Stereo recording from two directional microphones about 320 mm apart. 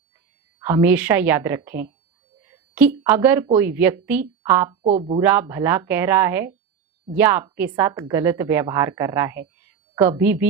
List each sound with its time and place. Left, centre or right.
0.6 s a woman's voice: centre
2.4 s a sound: centre
3.6 s a woman's voice: centre
4.8 s speech: centre
5.2 s a woman's voice: centre